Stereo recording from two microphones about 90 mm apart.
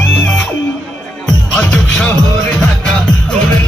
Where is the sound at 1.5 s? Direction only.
10° left (ahead or behind).